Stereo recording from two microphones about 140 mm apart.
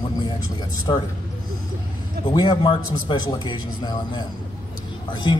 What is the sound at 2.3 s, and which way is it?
Speech, 35° left (ahead or behind).